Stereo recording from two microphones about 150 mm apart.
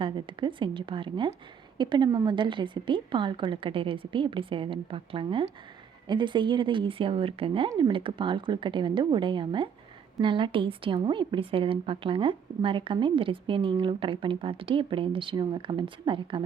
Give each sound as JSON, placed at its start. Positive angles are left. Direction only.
{"t": 0.0, "sound": "a woman's voice", "side_deg": -35}